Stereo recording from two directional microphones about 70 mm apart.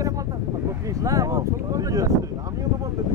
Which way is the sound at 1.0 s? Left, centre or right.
Right.